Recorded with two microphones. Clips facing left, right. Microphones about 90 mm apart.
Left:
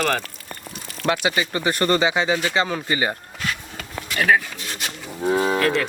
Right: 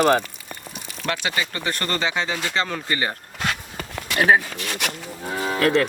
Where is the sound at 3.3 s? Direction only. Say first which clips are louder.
Right 2 dB; 55° right (ahead or behind).